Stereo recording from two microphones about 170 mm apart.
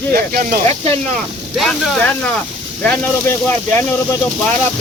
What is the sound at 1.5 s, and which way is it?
Speech, centre (ahead or behind).